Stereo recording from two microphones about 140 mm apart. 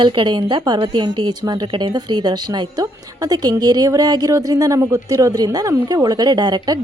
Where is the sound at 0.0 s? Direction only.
35° right (ahead or behind).